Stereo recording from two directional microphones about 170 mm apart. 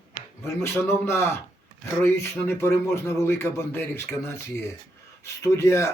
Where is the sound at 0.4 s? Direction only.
15° left (ahead or behind).